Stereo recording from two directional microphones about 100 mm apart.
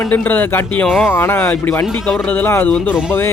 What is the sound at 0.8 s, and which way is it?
Speech, centre (ahead or behind).